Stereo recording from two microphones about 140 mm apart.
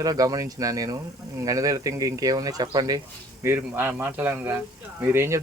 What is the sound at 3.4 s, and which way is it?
A man's voice, 15° right (ahead or behind).